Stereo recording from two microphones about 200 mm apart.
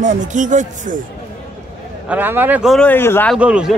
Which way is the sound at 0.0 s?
35° right (ahead or behind).